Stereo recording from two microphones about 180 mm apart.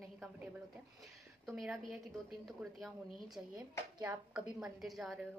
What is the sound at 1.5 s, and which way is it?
A woman's voice, centre (ahead or behind).